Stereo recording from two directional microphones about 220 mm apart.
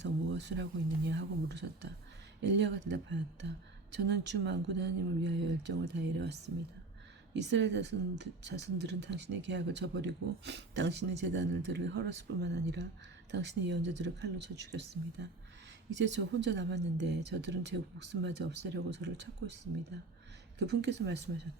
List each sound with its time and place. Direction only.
0.0 s speech: 50° right (ahead or behind)
7.3 s speech: 50° right (ahead or behind)
20.6 s speech: 50° right (ahead or behind)